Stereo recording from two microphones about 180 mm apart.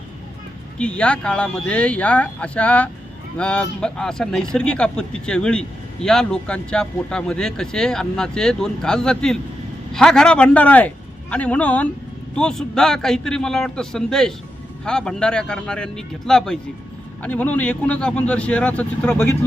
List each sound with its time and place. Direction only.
0.8 s a man's voice: 5° left (ahead or behind)